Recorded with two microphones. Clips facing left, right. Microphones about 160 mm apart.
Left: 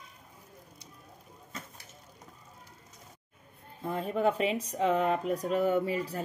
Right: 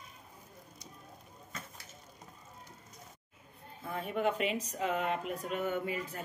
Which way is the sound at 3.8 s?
35° left (ahead or behind).